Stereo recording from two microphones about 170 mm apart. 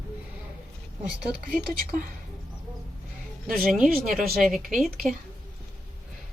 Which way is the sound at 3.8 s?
55° right (ahead or behind).